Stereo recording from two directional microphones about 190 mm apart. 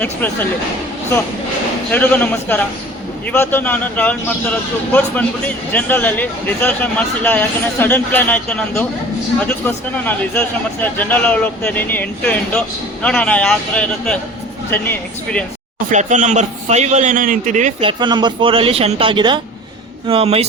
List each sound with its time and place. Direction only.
0.0 s speech: 10° left (ahead or behind)
1.9 s speech: 10° left (ahead or behind)
5.7 s speech: 10° left (ahead or behind)
15.9 s a man's voice: 40° right (ahead or behind)
17.8 s a man's voice: 25° right (ahead or behind)